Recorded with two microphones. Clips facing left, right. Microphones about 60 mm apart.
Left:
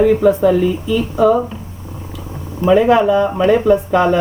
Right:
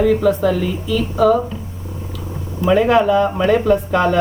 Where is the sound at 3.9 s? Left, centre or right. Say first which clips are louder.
Left 3 dB; centre.